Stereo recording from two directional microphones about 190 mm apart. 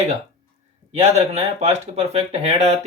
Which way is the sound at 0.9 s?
35° right (ahead or behind).